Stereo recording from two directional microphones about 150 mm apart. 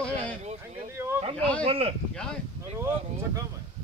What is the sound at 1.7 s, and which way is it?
Speech, 40° right (ahead or behind).